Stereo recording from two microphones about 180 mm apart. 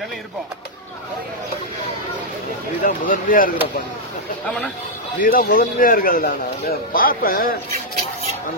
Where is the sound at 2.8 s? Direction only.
50° left (ahead or behind).